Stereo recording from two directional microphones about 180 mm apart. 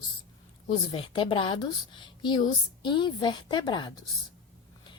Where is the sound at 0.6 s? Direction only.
25° left (ahead or behind).